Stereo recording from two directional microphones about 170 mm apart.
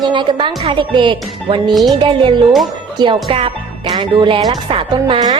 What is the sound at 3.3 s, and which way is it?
A woman's voice, 35° right (ahead or behind).